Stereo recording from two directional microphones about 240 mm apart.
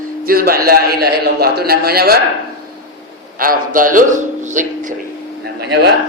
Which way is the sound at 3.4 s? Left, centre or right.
Right.